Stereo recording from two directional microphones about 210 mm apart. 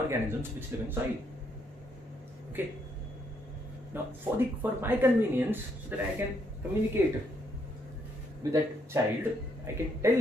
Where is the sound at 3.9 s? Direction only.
10° right (ahead or behind).